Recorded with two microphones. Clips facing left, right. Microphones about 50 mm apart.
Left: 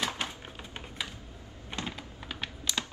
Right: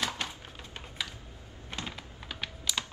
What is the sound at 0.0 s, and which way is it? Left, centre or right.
Typewriter, left.